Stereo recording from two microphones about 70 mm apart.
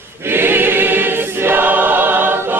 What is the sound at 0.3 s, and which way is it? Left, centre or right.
Choir, right.